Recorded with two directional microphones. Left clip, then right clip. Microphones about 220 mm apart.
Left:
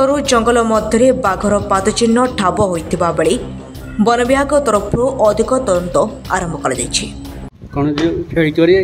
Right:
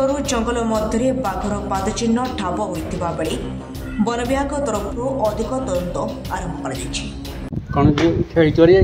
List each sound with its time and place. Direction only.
0.0 s a man's voice: 30° left (ahead or behind)
8.4 s speech: 10° left (ahead or behind)